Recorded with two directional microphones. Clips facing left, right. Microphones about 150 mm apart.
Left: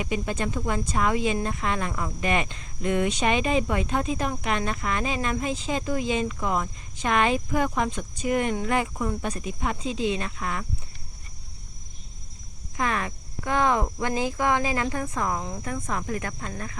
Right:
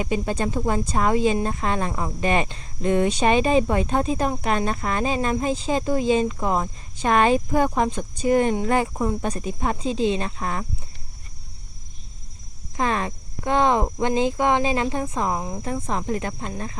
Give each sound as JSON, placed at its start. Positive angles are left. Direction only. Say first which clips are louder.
{"t": 0.0, "sound": "speech", "louder": "right 4 dB", "side_deg": -35}
{"t": 12.7, "sound": "speech", "louder": "right 4 dB", "side_deg": -30}